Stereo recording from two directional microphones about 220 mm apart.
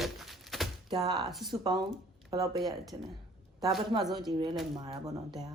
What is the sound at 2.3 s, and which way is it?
Speech, 15° right (ahead or behind).